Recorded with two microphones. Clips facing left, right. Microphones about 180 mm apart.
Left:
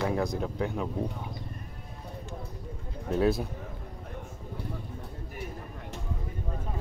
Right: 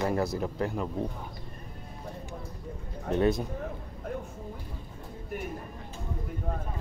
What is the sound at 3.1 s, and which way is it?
Speech, 5° left (ahead or behind).